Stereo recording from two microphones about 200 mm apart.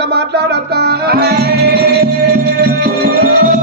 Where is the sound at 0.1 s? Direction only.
55° right (ahead or behind).